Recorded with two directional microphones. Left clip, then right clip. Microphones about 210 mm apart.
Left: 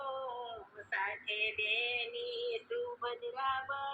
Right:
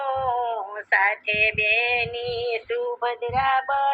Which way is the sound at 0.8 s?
30° right (ahead or behind).